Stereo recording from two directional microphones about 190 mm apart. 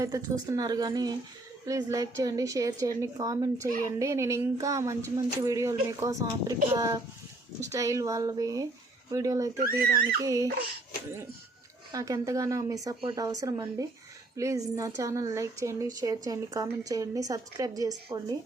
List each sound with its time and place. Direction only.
0.0 s a woman's voice: 20° right (ahead or behind)
9.6 s speech: 55° right (ahead or behind)
10.2 s a woman's voice: 20° right (ahead or behind)
11.9 s a woman's voice: 20° right (ahead or behind)